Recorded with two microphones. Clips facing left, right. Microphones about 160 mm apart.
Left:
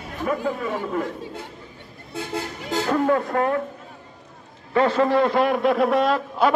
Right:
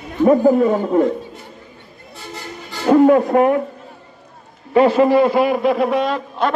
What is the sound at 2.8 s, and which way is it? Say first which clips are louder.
Speech: right 10 dB; 20° right (ahead or behind).